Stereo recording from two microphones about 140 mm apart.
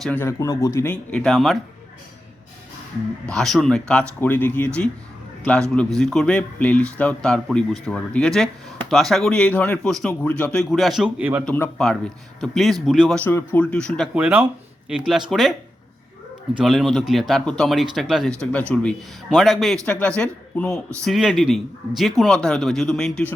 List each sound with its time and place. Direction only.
0.0 s speech: 15° left (ahead or behind)
1.1 s speech: 5° left (ahead or behind)
3.2 s a man's voice: 5° left (ahead or behind)
6.0 s speech: 5° left (ahead or behind)
11.2 s speech: 10° right (ahead or behind)
11.4 s a man's voice: 15° left (ahead or behind)
13.1 s a man's voice: 15° left (ahead or behind)
14.2 s speech: 10° right (ahead or behind)
16.6 s a man's voice: centre (ahead or behind)